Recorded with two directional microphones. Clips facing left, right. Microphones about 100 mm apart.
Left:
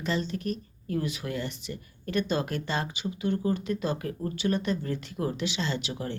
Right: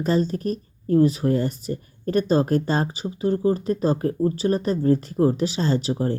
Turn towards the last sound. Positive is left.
turn(degrees=-35)  # may be behind; listen again after turning